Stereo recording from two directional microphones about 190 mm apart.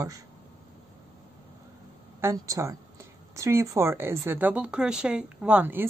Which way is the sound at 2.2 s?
15° right (ahead or behind).